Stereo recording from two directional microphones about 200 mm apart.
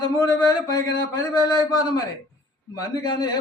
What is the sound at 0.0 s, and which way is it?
Speech, 20° left (ahead or behind).